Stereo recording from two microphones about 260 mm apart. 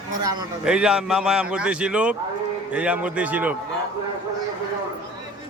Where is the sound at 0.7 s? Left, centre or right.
Centre.